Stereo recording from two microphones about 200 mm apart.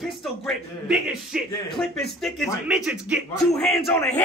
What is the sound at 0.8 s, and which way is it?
Speech, 5° right (ahead or behind).